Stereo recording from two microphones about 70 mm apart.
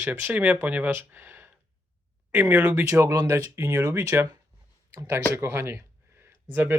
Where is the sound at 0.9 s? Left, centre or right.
Right.